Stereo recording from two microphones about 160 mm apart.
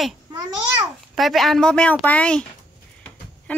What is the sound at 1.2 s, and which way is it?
Speech, centre (ahead or behind).